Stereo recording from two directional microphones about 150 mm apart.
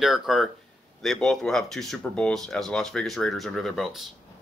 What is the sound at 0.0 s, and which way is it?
Speech, 5° right (ahead or behind).